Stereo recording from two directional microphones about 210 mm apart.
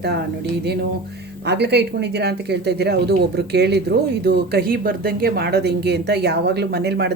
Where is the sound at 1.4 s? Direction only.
50° right (ahead or behind).